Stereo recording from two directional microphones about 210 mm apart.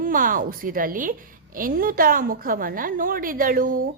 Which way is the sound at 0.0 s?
40° right (ahead or behind).